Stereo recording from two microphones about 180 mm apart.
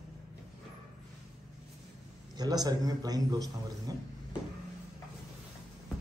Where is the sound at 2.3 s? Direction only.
20° right (ahead or behind).